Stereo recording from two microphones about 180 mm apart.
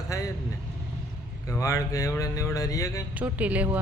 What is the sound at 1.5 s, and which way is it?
Speech, 15° left (ahead or behind).